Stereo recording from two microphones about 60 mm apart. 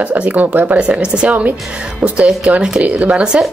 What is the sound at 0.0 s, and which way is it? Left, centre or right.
Speech, right.